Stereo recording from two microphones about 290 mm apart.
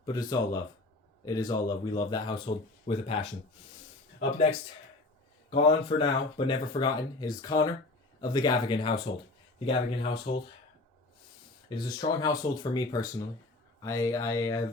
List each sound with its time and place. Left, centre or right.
0.0 s speech: centre
4.2 s speech: left
11.7 s speech: centre